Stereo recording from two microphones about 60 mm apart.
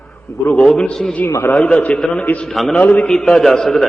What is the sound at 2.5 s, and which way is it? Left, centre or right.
Speech, centre.